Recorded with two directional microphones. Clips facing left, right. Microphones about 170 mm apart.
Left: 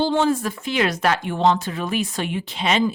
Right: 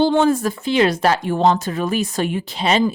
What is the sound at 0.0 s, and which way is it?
Speech, 55° right (ahead or behind).